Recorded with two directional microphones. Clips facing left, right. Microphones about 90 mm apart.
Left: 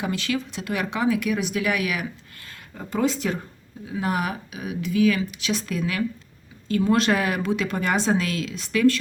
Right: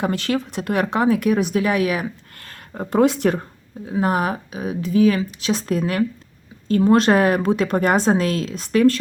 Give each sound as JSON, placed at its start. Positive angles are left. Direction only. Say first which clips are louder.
{"t": 0.0, "sound": "a woman's voice", "louder": "right 5 dB", "side_deg": -40}
{"t": 2.4, "sound": "speech", "louder": "right 8 dB", "side_deg": -50}
{"t": 3.8, "sound": "a woman's voice", "louder": "right 6 dB", "side_deg": -35}